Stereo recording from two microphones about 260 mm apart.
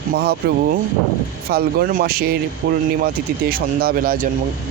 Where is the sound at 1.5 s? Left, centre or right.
Right.